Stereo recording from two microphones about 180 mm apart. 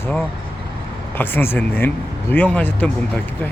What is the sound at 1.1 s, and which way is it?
Speech, 10° left (ahead or behind).